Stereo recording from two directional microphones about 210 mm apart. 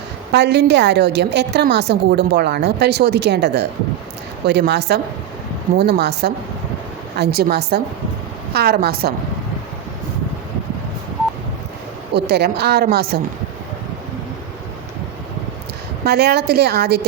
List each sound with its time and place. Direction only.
0.3 s a woman's voice: 55° right (ahead or behind)
12.1 s a woman's voice: 50° right (ahead or behind)
16.0 s a woman's voice: 50° right (ahead or behind)